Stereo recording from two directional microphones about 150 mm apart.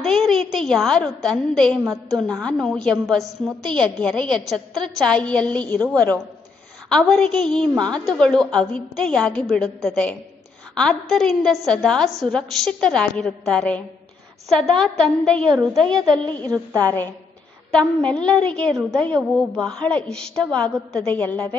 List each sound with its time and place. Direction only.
0.0 s a woman's voice: centre (ahead or behind)
16.1 s a woman's voice: 25° right (ahead or behind)
16.8 s a woman's voice: 10° left (ahead or behind)